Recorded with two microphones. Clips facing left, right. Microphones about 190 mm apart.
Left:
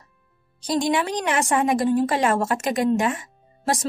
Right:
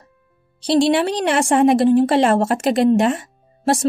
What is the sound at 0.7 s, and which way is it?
Speech, 75° right (ahead or behind).